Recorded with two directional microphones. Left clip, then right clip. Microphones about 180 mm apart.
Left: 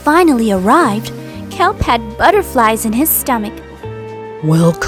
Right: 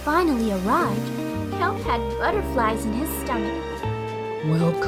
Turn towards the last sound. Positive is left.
turn(degrees=55)  # may be behind; listen again after turning